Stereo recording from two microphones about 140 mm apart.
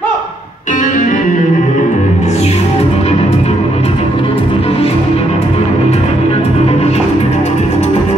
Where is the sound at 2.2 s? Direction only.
50° left (ahead or behind).